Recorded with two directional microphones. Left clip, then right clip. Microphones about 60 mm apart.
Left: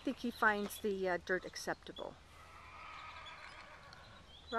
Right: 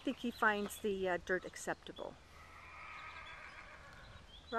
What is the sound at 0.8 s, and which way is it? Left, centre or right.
Speech, centre.